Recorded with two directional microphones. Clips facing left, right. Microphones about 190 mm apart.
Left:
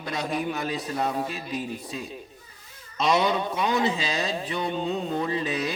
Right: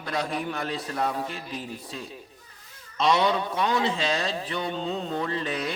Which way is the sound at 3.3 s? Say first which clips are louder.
Even; 20° left (ahead or behind).